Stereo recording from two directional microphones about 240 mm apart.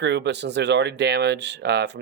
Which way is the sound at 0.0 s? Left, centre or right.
Right.